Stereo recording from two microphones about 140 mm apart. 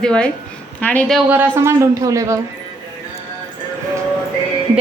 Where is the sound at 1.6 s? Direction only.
20° right (ahead or behind).